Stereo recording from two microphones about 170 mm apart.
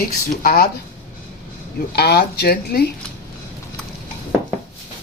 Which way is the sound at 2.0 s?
75° left (ahead or behind).